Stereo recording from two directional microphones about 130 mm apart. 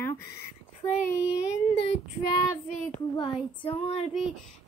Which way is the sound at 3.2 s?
45° left (ahead or behind).